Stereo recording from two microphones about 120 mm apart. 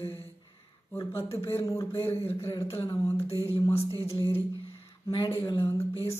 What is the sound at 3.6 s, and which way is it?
Speech, 20° left (ahead or behind).